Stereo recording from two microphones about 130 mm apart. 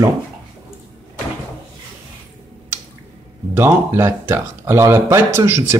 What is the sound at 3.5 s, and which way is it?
Speech, 20° right (ahead or behind).